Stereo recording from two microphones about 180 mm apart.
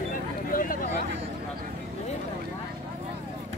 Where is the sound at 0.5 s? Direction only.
50° left (ahead or behind).